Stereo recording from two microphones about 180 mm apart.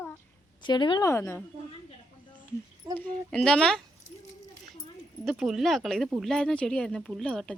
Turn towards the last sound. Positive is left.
turn(degrees=5)  # may be behind; listen again after turning